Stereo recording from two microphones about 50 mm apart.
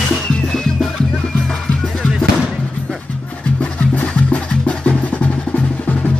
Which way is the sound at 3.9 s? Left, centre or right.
Left.